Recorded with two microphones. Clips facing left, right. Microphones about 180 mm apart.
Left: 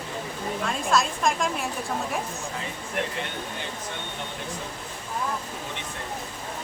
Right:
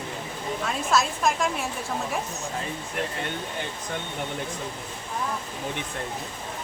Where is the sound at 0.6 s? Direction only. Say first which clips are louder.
Even; centre (ahead or behind).